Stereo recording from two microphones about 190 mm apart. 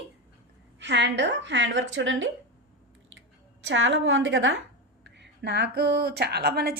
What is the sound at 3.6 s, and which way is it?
Speech, 75° right (ahead or behind).